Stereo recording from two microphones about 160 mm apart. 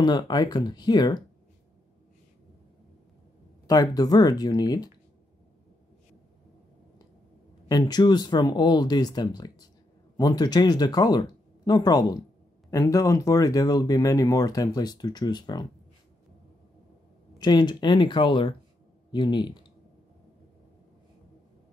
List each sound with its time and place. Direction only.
0.0 s speech: 25° left (ahead or behind)
3.6 s speech: 25° left (ahead or behind)
7.6 s speech: 25° left (ahead or behind)
17.4 s speech: 25° left (ahead or behind)